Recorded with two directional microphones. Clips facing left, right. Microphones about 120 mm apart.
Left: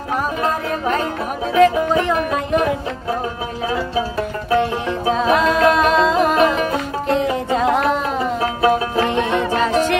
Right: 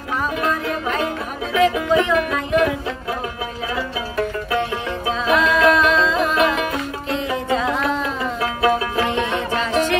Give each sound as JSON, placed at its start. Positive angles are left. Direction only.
{"t": 0.4, "sound": "music", "side_deg": 40}
{"t": 4.6, "sound": "music", "side_deg": 45}
{"t": 7.5, "sound": "music", "side_deg": 50}
{"t": 8.4, "sound": "music", "side_deg": 30}
{"t": 9.0, "sound": "music", "side_deg": 50}